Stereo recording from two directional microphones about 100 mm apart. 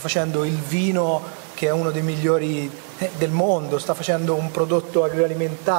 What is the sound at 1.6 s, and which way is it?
Speech, 10° left (ahead or behind).